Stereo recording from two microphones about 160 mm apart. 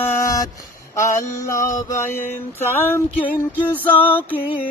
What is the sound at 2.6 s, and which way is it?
Mantra, 15° left (ahead or behind).